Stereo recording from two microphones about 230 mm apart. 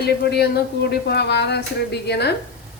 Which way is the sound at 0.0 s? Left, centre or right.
Left.